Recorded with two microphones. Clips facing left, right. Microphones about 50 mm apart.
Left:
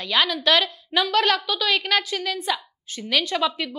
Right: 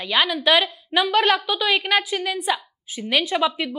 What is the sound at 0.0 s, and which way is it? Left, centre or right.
A woman's voice, centre.